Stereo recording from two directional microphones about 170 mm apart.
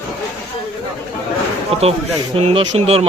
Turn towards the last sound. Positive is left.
turn(degrees=-35)  # may be behind; listen again after turning